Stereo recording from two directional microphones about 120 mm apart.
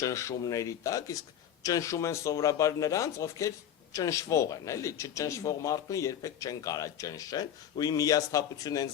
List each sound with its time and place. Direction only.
0.0 s speech: 25° left (ahead or behind)